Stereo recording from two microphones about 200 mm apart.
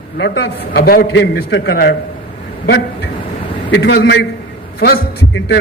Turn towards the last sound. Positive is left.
turn(degrees=55)  # may be behind; listen again after turning